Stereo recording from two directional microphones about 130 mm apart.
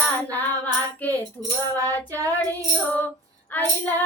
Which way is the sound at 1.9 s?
25° right (ahead or behind).